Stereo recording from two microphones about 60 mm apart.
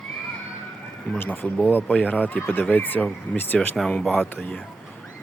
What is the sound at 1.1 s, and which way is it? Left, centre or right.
Speech, left.